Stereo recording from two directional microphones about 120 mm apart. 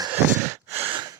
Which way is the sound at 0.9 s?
35° right (ahead or behind).